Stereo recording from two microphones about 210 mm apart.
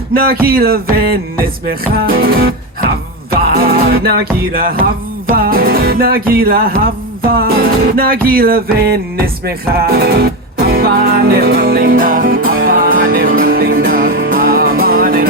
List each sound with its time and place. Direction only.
0.1 s music: 45° right (ahead or behind)